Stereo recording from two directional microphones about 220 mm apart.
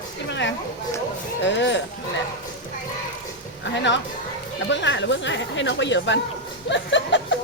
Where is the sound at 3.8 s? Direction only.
55° left (ahead or behind).